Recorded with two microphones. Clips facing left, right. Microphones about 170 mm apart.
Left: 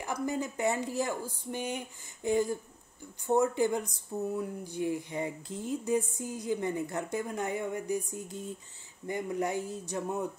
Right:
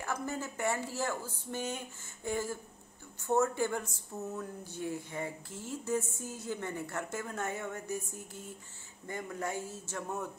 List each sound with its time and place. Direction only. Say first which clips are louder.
0.0 s speech: left 4 dB; 15° left (ahead or behind)